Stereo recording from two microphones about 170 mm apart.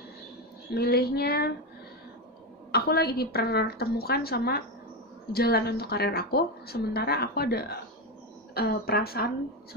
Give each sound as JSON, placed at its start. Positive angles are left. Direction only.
{"t": 0.7, "sound": "child singing", "side_deg": 65}
{"t": 2.7, "sound": "a woman's voice", "side_deg": 65}
{"t": 8.5, "sound": "child singing", "side_deg": 65}